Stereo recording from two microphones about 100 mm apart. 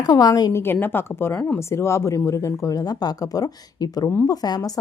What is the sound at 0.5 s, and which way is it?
A woman's voice, 20° left (ahead or behind).